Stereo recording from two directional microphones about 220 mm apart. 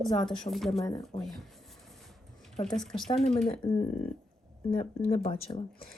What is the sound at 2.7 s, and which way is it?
Speech, centre (ahead or behind).